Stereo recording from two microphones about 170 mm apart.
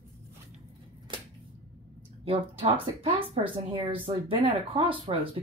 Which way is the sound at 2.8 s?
30° right (ahead or behind).